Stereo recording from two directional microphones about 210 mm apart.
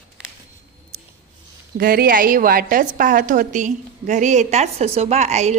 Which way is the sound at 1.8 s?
45° right (ahead or behind).